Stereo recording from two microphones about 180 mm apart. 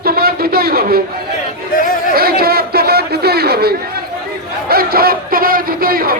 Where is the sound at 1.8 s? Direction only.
50° left (ahead or behind).